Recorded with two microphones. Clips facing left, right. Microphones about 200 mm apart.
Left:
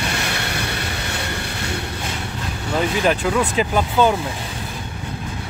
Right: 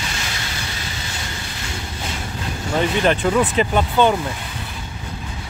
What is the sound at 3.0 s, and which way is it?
Speech, centre (ahead or behind).